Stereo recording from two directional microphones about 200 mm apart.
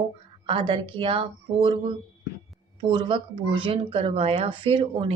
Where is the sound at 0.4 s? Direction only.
25° right (ahead or behind).